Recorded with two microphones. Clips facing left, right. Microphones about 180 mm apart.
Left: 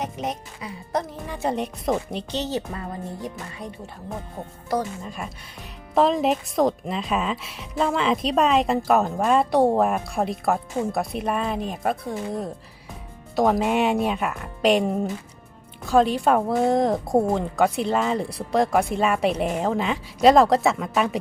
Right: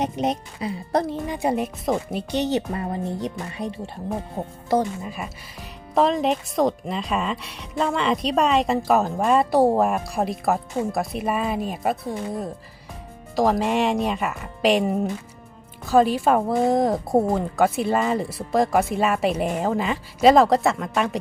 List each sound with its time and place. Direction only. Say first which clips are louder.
0.0 s speech: right 5 dB; 30° right (ahead or behind)
1.3 s speech: left 1 dB; 10° right (ahead or behind); by 4.5 s 30° right (ahead or behind)
5.0 s speech: right 1 dB; 5° right (ahead or behind)